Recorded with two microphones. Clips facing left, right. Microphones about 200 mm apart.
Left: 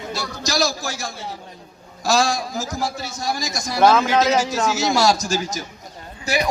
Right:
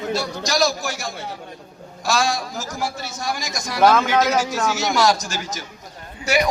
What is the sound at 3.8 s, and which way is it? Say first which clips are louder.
A man's voice: left 1 dB; 10° left (ahead or behind).